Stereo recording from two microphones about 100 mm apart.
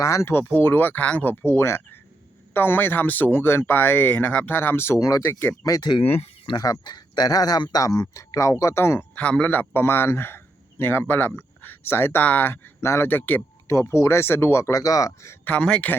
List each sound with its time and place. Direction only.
0.0 s speech: 30° left (ahead or behind)
6.0 s speech: 75° left (ahead or behind)
6.6 s speech: 40° left (ahead or behind)
9.1 s a man's voice: 10° left (ahead or behind)
13.7 s speech: 30° left (ahead or behind)
15.4 s speech: 10° left (ahead or behind)